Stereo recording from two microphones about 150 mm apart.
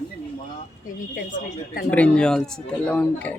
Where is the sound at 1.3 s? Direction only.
70° left (ahead or behind).